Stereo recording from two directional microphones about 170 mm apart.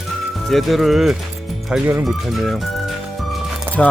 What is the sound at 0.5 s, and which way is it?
Speech, centre (ahead or behind).